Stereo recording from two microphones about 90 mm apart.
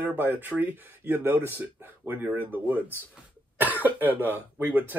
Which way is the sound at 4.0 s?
20° right (ahead or behind).